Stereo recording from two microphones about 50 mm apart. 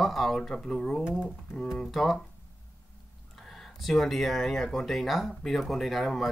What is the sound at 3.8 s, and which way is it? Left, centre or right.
Speech, centre.